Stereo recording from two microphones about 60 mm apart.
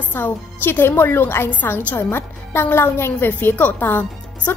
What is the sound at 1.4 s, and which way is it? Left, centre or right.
A woman's voice, left.